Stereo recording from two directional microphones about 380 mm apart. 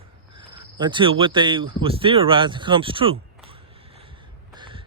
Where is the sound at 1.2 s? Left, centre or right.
Centre.